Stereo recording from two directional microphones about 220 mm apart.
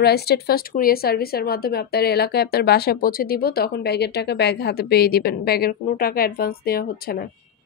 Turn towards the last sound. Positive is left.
turn(degrees=45)  # may be behind; listen again after turning